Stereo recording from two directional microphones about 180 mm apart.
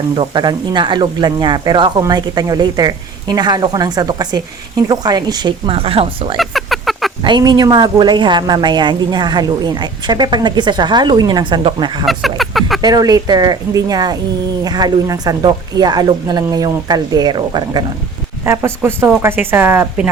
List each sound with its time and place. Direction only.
0.2 s a woman's voice: 25° right (ahead or behind)
6.3 s a sound: centre (ahead or behind)
7.2 s a woman's voice: 25° right (ahead or behind)
12.4 s speech: centre (ahead or behind)
12.8 s a woman's voice: 20° right (ahead or behind)